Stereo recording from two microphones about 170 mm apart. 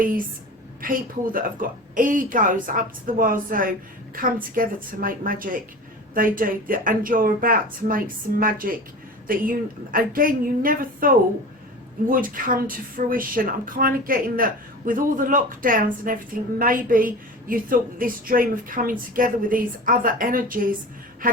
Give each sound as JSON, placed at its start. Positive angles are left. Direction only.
{"t": 0.8, "sound": "a woman's voice", "side_deg": -55}
{"t": 12.1, "sound": "speech", "side_deg": -55}